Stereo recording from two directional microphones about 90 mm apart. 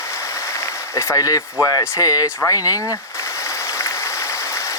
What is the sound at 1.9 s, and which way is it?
Speech, 40° left (ahead or behind).